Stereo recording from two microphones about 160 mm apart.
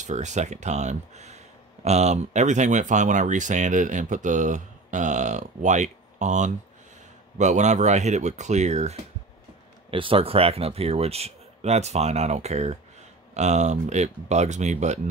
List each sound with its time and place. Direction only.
0.0 s speech: 50° right (ahead or behind)
9.8 s speech: 35° right (ahead or behind)